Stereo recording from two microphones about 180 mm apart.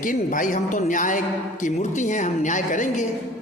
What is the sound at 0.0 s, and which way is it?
A man's voice, 50° left (ahead or behind).